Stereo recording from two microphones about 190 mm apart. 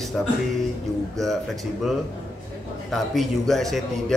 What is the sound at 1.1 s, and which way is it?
A man's voice, centre (ahead or behind).